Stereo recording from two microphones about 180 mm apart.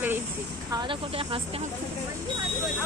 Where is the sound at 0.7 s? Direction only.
30° right (ahead or behind).